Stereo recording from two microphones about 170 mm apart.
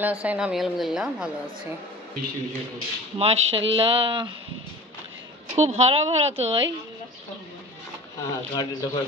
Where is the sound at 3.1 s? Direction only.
35° right (ahead or behind).